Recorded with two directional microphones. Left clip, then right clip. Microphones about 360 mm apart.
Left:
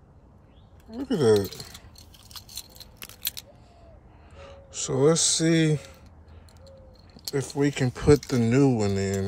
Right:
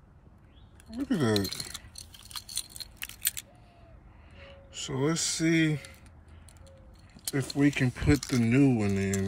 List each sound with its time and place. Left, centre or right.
0.9 s speech: centre
2.0 s a sound: centre
4.7 s speech: left
7.2 s speech: centre